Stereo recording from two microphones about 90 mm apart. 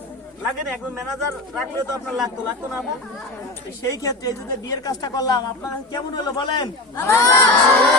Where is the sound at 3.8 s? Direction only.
40° left (ahead or behind).